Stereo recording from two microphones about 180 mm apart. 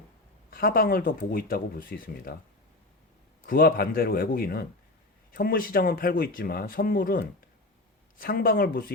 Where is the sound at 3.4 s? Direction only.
50° left (ahead or behind).